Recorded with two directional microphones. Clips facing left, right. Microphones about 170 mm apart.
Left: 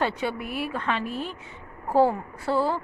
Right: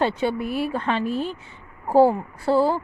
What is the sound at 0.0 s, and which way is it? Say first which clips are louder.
A woman's voice: right 5 dB; 30° right (ahead or behind).